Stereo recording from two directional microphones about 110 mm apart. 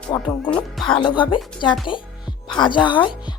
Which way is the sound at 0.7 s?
5° left (ahead or behind).